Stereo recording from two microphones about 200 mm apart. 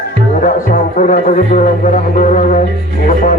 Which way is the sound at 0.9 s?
40° left (ahead or behind).